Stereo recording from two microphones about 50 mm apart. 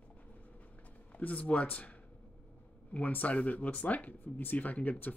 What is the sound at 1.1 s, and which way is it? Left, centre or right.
Speech, left.